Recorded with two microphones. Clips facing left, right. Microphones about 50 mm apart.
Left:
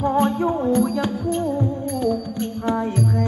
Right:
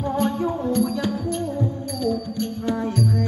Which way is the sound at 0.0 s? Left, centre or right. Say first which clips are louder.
Left 4 dB; left.